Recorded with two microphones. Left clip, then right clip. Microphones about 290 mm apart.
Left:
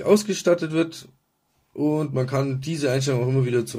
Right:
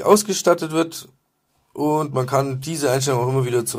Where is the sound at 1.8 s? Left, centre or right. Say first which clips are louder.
Right 4 dB; right.